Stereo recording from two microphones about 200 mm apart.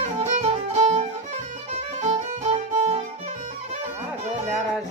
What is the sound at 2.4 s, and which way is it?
Music, 35° right (ahead or behind).